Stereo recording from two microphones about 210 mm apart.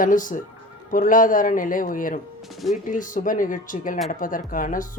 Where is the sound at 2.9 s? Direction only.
40° left (ahead or behind).